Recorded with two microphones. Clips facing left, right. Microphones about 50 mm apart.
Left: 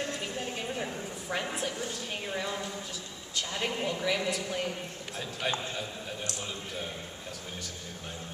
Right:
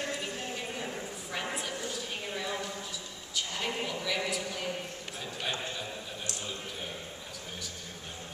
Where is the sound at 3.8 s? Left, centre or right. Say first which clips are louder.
Left 3 dB; left.